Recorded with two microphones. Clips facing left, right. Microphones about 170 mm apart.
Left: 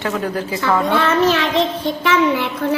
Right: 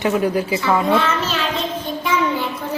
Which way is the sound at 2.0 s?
90° left.